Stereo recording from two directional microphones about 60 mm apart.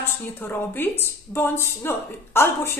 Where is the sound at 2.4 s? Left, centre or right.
Left.